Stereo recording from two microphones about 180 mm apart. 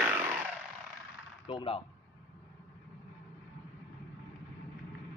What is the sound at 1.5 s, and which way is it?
Speech, 30° left (ahead or behind).